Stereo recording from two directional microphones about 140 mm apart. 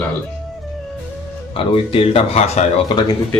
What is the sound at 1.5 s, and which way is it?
Speech, 40° left (ahead or behind).